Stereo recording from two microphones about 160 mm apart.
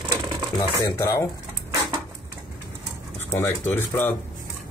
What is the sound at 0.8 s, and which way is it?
Speech, 20° left (ahead or behind).